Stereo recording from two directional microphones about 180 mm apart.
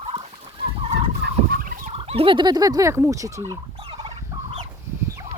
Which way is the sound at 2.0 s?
30° right (ahead or behind).